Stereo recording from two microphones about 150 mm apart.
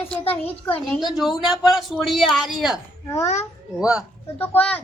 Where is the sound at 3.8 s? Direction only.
5° right (ahead or behind).